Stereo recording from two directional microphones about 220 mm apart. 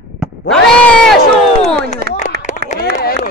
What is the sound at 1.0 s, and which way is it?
Speech, centre (ahead or behind).